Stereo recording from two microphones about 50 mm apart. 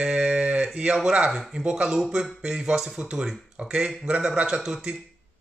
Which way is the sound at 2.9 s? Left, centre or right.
Right.